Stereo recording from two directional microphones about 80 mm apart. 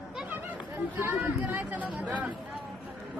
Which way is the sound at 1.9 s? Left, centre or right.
Centre.